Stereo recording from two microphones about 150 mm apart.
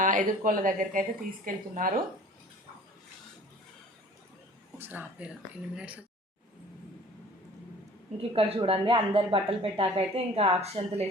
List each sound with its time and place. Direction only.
0.0 s speech: 60° right (ahead or behind)
4.8 s speech: 10° right (ahead or behind)
8.3 s speech: 40° right (ahead or behind)